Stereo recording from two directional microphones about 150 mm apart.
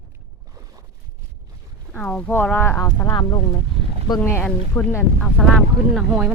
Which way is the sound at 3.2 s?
30° left (ahead or behind).